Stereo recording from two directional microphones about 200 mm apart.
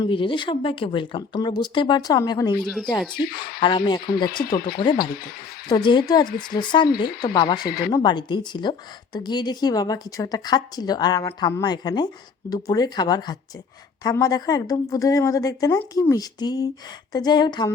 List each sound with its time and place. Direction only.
0.0 s a woman's voice: 25° left (ahead or behind)
2.6 s speech: centre (ahead or behind)
3.6 s a woman's voice: 25° left (ahead or behind)
7.7 s speech: 50° left (ahead or behind)
7.9 s a woman's voice: 20° left (ahead or behind)